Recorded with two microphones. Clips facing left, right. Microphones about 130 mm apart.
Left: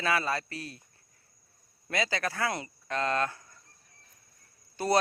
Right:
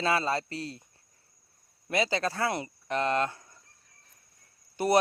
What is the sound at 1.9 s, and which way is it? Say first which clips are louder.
Speech: right 3 dB; 25° right (ahead or behind).